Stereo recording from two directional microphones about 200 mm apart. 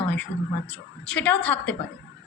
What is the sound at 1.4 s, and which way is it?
Speech, 5° left (ahead or behind).